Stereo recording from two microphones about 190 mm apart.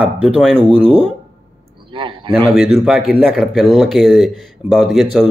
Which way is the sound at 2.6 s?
Centre (ahead or behind).